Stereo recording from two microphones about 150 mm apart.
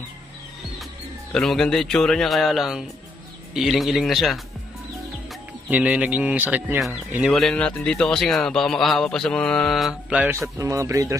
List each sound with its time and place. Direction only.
1.3 s speech: 5° left (ahead or behind)
5.7 s speech: 10° right (ahead or behind)
7.3 s speech: 5° left (ahead or behind)
10.6 s speech: 20° right (ahead or behind)